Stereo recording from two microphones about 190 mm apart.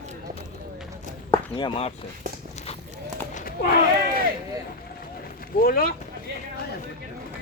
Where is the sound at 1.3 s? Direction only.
25° left (ahead or behind).